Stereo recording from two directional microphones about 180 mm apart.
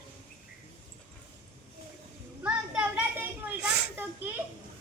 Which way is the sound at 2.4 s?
10° right (ahead or behind).